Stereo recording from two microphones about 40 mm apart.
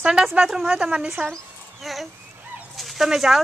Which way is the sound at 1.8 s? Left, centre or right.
Centre.